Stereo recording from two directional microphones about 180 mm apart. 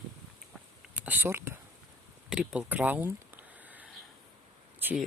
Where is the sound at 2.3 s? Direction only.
5° right (ahead or behind).